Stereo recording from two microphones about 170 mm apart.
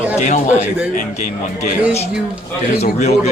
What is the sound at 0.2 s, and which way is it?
Speech, 45° left (ahead or behind).